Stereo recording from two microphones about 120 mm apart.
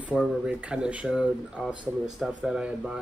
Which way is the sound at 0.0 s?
5° right (ahead or behind).